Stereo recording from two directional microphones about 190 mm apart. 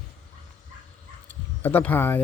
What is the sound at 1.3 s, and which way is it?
Speech, 10° left (ahead or behind).